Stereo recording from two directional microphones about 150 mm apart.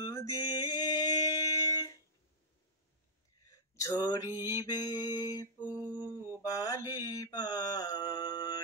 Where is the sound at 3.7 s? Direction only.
20° left (ahead or behind).